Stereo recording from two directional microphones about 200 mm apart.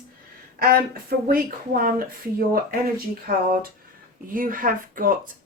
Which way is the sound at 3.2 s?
45° right (ahead or behind).